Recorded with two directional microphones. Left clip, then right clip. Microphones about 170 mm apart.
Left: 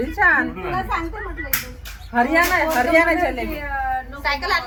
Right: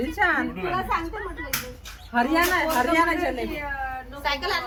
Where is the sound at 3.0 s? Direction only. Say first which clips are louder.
Left 5 dB; 30° left (ahead or behind).